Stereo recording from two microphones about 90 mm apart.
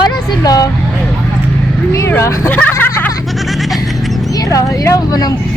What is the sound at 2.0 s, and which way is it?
Speech, 30° left (ahead or behind).